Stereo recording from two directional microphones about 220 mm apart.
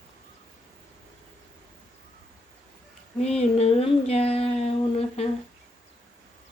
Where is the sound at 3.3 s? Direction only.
30° left (ahead or behind).